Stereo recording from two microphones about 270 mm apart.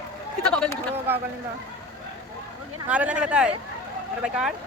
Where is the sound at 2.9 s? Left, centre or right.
Centre.